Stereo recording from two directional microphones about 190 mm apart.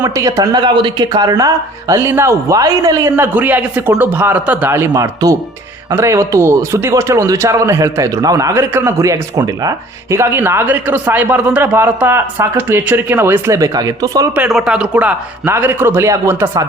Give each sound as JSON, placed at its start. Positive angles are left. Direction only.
{"t": 0.0, "sound": "speech", "side_deg": -15}
{"t": 14.3, "sound": "speech", "side_deg": -5}